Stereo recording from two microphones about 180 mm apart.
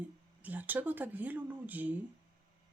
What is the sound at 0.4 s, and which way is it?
Speech, 10° right (ahead or behind).